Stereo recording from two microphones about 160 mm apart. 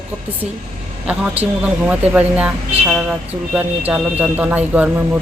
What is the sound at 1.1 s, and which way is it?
Speech, 5° right (ahead or behind).